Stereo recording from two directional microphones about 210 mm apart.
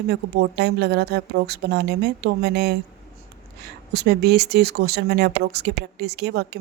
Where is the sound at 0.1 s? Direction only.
50° right (ahead or behind).